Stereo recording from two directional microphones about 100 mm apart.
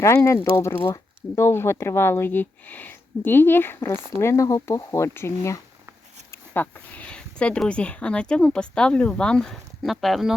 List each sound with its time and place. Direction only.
0.0 s speech: 25° left (ahead or behind); by 10.3 s centre (ahead or behind)